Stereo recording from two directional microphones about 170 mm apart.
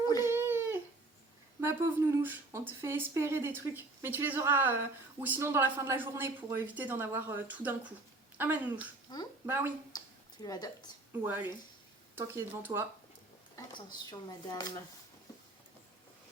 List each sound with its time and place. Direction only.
0.3 s a sound: 15° right (ahead or behind)
1.6 s a woman's voice: 15° right (ahead or behind)
9.1 s a sound: 25° left (ahead or behind)
9.5 s a woman's voice: 15° right (ahead or behind)
10.4 s speech: 20° left (ahead or behind)
11.1 s a woman's voice: 10° right (ahead or behind)
13.7 s speech: 25° left (ahead or behind)